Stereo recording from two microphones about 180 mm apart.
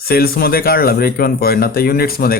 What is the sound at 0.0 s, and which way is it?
Speech, 55° left (ahead or behind).